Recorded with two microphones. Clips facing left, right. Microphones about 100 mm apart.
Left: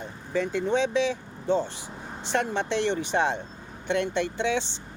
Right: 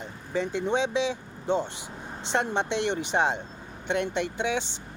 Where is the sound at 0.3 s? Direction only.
20° right (ahead or behind).